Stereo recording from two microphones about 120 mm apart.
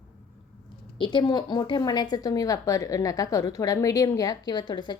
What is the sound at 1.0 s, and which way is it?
A woman's voice, 45° left (ahead or behind).